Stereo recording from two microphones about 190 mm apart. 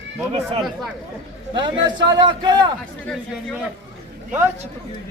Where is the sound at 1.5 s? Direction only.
25° right (ahead or behind).